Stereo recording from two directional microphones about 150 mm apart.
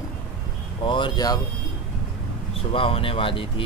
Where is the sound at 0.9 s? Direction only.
30° left (ahead or behind).